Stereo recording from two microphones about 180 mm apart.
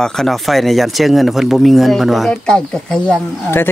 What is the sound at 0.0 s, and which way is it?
Speech, 5° left (ahead or behind).